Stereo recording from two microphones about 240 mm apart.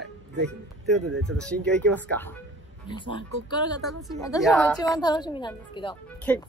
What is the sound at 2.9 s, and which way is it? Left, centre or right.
Speech, centre.